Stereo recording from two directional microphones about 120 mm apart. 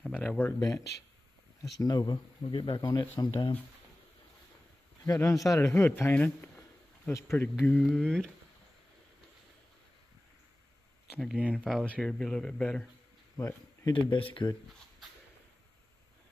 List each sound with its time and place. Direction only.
0.0 s speech: 10° left (ahead or behind)
0.6 s speech: 30° left (ahead or behind)
5.0 s a man's voice: 25° left (ahead or behind); by 8.3 s 5° left (ahead or behind)
11.5 s speech: 5° left (ahead or behind)
13.4 s speech: 25° left (ahead or behind)
14.1 s speech: 45° left (ahead or behind)